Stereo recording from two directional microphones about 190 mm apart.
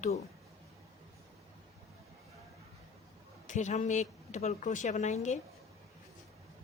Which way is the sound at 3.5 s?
40° left (ahead or behind).